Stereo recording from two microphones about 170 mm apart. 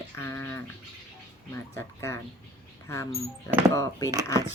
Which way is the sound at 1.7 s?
20° left (ahead or behind).